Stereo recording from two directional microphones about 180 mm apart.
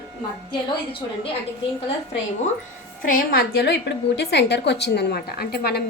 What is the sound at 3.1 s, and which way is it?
A woman's voice, 55° left (ahead or behind).